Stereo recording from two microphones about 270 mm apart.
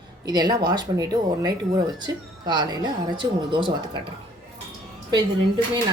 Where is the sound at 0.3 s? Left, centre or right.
Centre.